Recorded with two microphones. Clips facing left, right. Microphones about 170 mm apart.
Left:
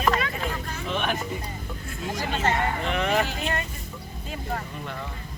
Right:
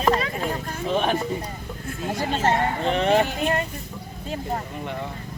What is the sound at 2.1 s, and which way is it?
Speech, 35° right (ahead or behind).